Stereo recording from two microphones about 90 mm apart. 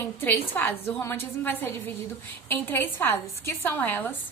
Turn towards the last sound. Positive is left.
turn(degrees=20)  # may be behind; listen again after turning